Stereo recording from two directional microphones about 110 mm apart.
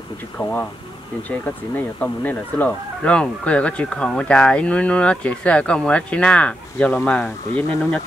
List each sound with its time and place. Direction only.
0.4 s speech: 15° left (ahead or behind)